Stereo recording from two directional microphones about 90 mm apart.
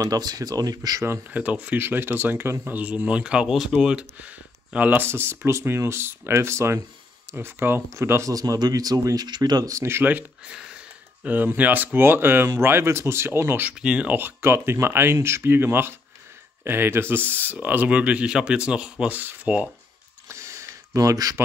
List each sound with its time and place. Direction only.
0.0 s speech: 45° right (ahead or behind)
1.3 s speech: 15° right (ahead or behind); by 8.3 s 30° right (ahead or behind)
8.3 s speech: 40° right (ahead or behind); by 10.2 s 25° right (ahead or behind)
10.5 s speech: 10° right (ahead or behind)
20.2 s a sound: 30° right (ahead or behind)